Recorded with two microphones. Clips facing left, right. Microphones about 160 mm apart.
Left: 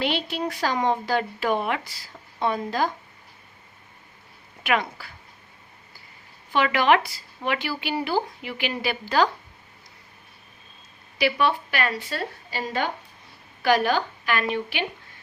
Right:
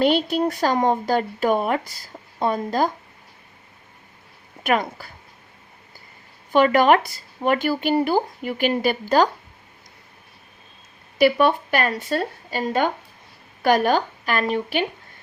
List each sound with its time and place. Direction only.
0.0 s speech: 45° right (ahead or behind)
4.6 s speech: 45° right (ahead or behind)
6.5 s speech: 45° right (ahead or behind)
11.2 s speech: 50° right (ahead or behind)